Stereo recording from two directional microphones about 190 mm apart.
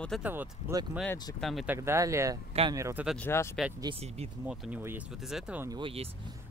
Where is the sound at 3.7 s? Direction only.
30° right (ahead or behind).